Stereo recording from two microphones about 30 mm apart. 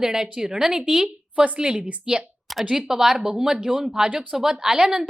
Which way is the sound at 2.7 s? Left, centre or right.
Centre.